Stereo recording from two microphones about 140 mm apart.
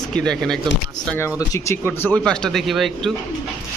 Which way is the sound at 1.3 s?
20° left (ahead or behind).